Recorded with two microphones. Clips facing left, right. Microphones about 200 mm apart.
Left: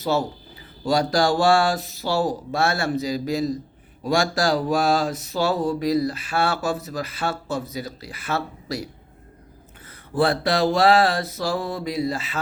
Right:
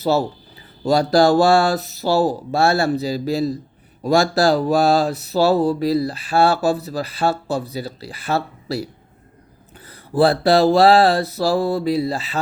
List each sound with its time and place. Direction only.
0.0 s speech: 35° right (ahead or behind)
10.2 s speech: 35° right (ahead or behind)